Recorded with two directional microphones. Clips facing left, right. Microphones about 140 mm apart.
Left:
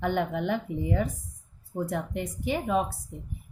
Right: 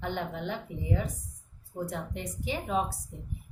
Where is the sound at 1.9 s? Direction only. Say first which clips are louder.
Left 5 dB; 55° left (ahead or behind).